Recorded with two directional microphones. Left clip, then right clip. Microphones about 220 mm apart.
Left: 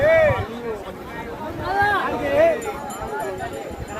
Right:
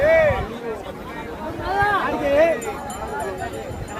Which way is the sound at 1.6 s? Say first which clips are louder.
Even; 30° left (ahead or behind).